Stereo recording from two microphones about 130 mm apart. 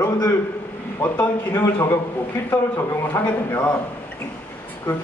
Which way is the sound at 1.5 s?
20° left (ahead or behind).